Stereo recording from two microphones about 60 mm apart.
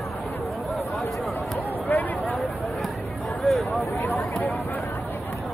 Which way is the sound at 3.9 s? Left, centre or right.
Left.